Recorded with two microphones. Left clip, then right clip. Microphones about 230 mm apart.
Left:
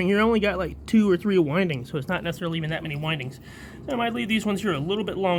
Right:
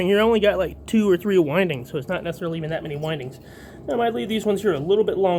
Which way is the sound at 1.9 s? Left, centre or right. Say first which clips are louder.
Right 2 dB; left.